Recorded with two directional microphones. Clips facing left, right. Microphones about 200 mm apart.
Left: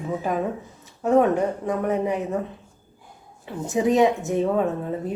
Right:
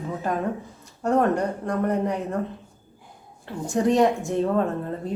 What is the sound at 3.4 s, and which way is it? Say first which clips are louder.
Speech: even; 5° left (ahead or behind).